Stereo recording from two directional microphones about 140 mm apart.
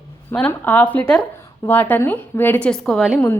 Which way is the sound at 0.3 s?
10° left (ahead or behind).